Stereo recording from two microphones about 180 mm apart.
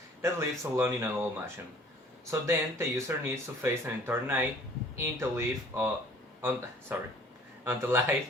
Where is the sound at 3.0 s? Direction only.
15° right (ahead or behind).